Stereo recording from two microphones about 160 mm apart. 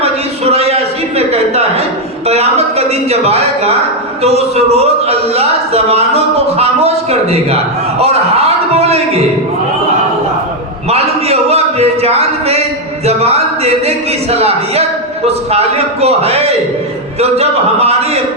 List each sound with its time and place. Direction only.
0.5 s a sound: 40° right (ahead or behind)
2.2 s a man's voice: 40° right (ahead or behind)
10.8 s a man's voice: 40° right (ahead or behind)